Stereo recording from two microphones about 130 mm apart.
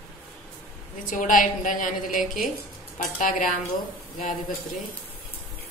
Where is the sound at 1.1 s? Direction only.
90° left.